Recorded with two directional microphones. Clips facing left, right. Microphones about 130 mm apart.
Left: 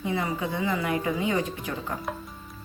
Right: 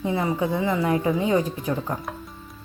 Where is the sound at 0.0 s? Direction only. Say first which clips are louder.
Right 5 dB; 30° right (ahead or behind).